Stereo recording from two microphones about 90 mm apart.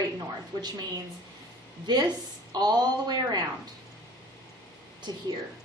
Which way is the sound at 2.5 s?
50° right (ahead or behind).